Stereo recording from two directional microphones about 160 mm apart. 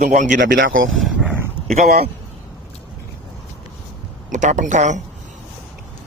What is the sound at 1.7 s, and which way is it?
Speech, 45° right (ahead or behind).